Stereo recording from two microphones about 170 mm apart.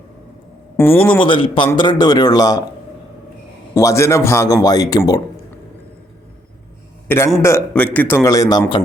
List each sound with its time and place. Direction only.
0.8 s a man's voice: 10° left (ahead or behind)
1.2 s speech: 30° left (ahead or behind)
3.8 s speech: 15° left (ahead or behind)
7.1 s a man's voice: 10° left (ahead or behind)